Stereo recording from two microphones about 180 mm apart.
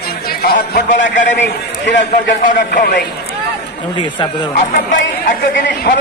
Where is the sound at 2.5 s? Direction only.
55° left (ahead or behind).